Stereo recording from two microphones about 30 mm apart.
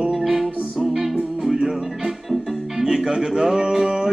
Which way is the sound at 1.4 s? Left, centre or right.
Right.